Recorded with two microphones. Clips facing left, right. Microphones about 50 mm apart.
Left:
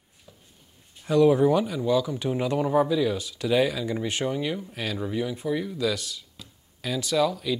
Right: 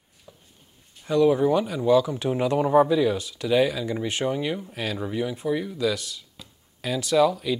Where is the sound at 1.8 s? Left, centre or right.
Centre.